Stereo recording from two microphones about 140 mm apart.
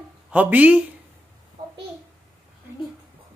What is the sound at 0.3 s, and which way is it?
Speech, 10° right (ahead or behind).